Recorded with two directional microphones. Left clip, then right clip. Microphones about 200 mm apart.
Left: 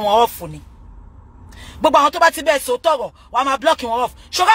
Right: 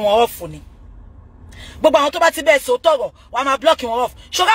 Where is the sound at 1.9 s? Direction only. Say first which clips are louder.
Left 1 dB; 10° left (ahead or behind).